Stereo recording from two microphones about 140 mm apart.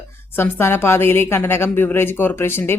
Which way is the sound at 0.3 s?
15° left (ahead or behind).